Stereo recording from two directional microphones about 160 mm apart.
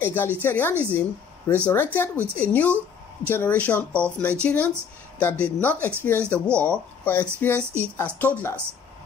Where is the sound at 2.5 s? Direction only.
10° left (ahead or behind).